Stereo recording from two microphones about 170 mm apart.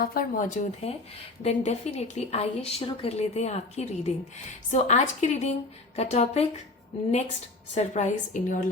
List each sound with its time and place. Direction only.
0.0 s a woman's voice: 60° left (ahead or behind); by 6.5 s 40° left (ahead or behind)
7.8 s speech: 45° left (ahead or behind)